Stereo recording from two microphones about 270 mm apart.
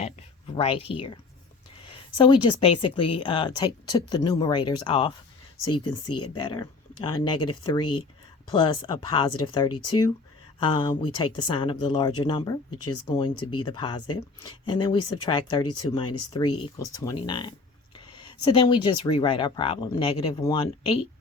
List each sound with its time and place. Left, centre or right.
0.0 s a sound: left
1.9 s speech: centre
6.1 s speech: left
6.3 s speech: centre
17.9 s a sound: centre
18.4 s speech: centre